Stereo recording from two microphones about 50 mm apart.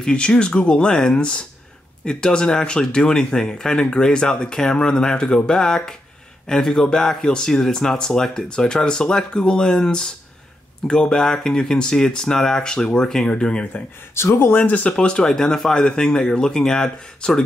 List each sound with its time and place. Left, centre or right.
0.0 s speech: centre
14.1 s speech: left
14.5 s speech: left; by 17.4 s centre